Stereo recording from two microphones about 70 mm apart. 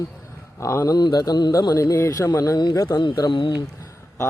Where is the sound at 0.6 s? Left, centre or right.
Left.